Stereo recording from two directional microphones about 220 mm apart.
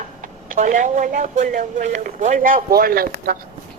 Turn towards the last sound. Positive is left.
turn(degrees=-40)  # may be behind; listen again after turning